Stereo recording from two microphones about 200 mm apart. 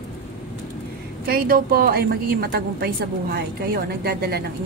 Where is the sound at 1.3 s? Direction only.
45° right (ahead or behind).